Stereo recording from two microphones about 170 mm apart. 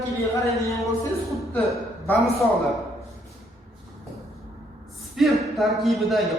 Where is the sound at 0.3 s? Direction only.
20° left (ahead or behind).